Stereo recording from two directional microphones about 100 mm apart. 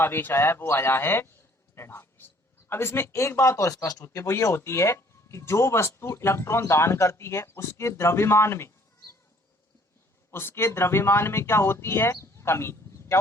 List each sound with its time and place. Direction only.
0.0 s a man's voice: 20° left (ahead or behind)
10.3 s speech: 25° left (ahead or behind)